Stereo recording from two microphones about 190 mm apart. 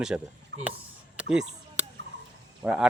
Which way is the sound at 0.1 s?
10° right (ahead or behind).